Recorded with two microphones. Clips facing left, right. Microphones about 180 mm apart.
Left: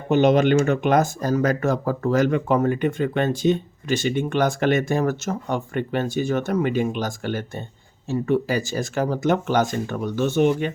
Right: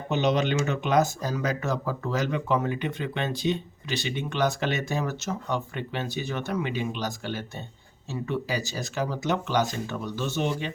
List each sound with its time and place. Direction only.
0.1 s speech: 50° left (ahead or behind)